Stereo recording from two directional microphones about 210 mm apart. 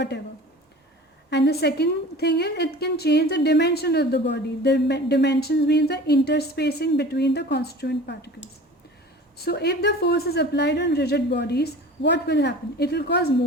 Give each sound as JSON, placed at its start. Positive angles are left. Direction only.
{"t": 1.3, "sound": "a woman's voice", "side_deg": 50}
{"t": 9.4, "sound": "a woman's voice", "side_deg": 50}